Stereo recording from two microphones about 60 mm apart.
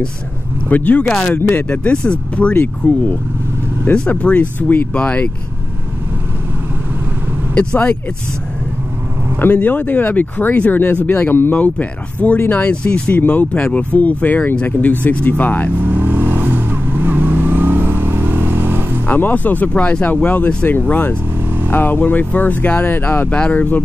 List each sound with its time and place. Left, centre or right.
0.7 s speech: left
4.1 s speech: left
7.5 s speech: centre
9.4 s speech: left
13.6 s speech: centre
13.9 s speech: left
15.8 s vehicle: right
19.0 s speech: left